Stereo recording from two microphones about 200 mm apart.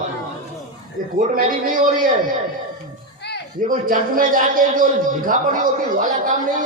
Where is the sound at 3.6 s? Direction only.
45° right (ahead or behind).